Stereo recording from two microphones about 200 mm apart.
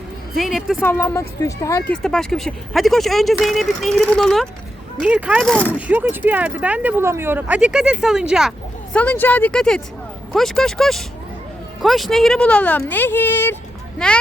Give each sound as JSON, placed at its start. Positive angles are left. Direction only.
{"t": 0.3, "sound": "speech", "side_deg": 0}
{"t": 1.9, "sound": "speech", "side_deg": 5}
{"t": 5.7, "sound": "speech", "side_deg": -10}
{"t": 9.0, "sound": "speech", "side_deg": 10}